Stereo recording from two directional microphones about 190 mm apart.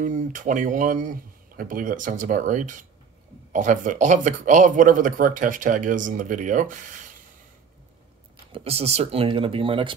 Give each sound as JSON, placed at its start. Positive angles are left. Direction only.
{"t": 0.0, "sound": "speech", "side_deg": -45}
{"t": 8.5, "sound": "speech", "side_deg": -30}